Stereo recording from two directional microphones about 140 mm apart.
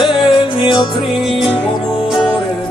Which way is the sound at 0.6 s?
35° left (ahead or behind).